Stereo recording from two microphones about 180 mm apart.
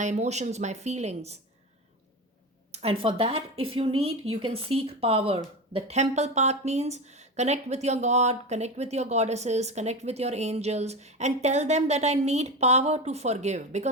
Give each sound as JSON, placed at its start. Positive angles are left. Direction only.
{"t": 0.0, "sound": "speech", "side_deg": -40}
{"t": 2.7, "sound": "speech", "side_deg": -30}